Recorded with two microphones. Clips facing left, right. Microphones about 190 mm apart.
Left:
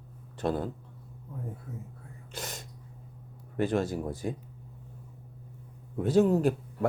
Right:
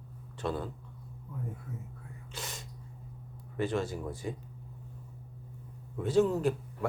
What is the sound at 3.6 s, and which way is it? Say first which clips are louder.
Speech: left 4 dB; 45° left (ahead or behind).